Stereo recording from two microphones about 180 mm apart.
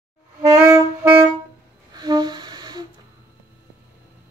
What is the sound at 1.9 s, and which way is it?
Music, 20° right (ahead or behind).